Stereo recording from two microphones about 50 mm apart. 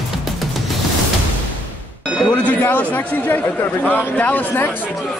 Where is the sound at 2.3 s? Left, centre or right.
Left.